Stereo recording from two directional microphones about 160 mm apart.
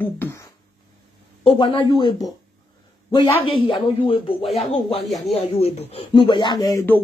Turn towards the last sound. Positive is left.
turn(degrees=20)  # may be behind; listen again after turning